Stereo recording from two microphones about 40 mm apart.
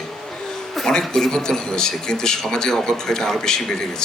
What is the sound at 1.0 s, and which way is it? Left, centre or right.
Speech, centre.